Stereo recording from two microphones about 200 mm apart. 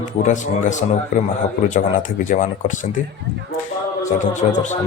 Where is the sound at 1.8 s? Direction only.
40° left (ahead or behind).